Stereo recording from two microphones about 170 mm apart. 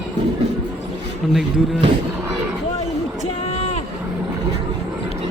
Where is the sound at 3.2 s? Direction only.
35° left (ahead or behind).